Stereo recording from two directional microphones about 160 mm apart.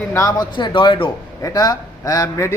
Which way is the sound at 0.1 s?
25° left (ahead or behind).